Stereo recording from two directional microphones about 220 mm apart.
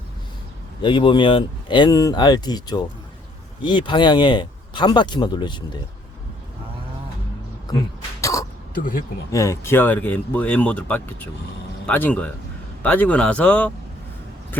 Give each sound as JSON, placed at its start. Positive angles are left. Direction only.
{"t": 0.8, "sound": "speech", "side_deg": 20}
{"t": 8.2, "sound": "throat clearing", "side_deg": 15}
{"t": 8.7, "sound": "speech", "side_deg": 40}
{"t": 9.3, "sound": "speech", "side_deg": 15}